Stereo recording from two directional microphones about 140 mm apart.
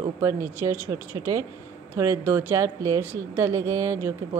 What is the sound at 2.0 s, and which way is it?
Speech, 20° right (ahead or behind).